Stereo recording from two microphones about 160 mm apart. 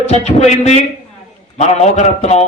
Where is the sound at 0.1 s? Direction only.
40° left (ahead or behind).